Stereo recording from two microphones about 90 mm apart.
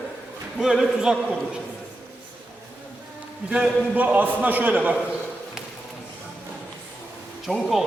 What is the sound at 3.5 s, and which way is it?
A man's voice, 15° right (ahead or behind).